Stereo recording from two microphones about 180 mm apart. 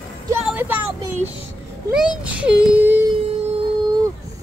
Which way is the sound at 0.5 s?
10° right (ahead or behind).